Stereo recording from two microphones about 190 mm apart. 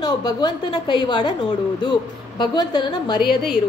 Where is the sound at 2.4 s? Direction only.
25° left (ahead or behind).